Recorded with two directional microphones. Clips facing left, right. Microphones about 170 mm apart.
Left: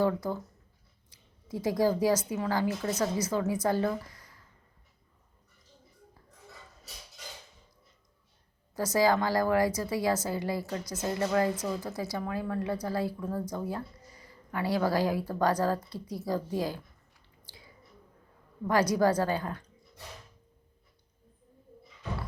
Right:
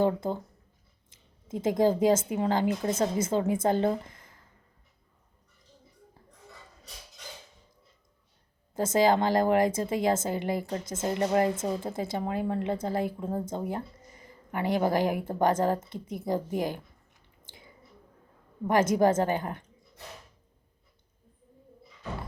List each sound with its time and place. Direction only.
0.0 s speech: 25° right (ahead or behind)
1.5 s speech: 25° right (ahead or behind)
8.7 s speech: 25° right (ahead or behind)
18.7 s speech: 25° right (ahead or behind)